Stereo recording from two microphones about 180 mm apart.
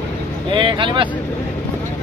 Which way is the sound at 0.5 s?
25° right (ahead or behind).